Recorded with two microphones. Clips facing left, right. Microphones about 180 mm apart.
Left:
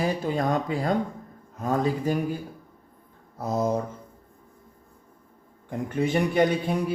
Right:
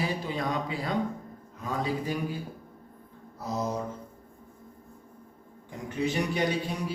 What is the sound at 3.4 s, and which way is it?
Speech, 50° left (ahead or behind).